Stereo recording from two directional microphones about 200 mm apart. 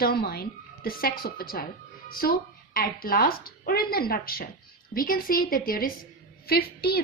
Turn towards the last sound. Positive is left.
turn(degrees=50)  # may be behind; listen again after turning